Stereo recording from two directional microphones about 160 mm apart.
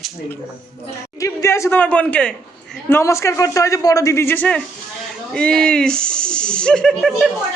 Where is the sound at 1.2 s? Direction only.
20° left (ahead or behind); by 7.2 s centre (ahead or behind).